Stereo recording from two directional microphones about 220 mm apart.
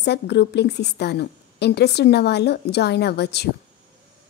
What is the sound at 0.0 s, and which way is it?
A woman's voice, 50° left (ahead or behind).